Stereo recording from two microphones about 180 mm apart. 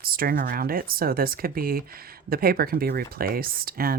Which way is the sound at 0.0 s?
55° right (ahead or behind).